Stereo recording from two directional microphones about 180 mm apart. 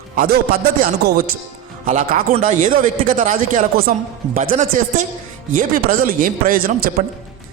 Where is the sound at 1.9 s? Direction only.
45° right (ahead or behind).